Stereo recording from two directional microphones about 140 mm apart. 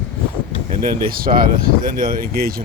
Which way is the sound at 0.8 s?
90° right.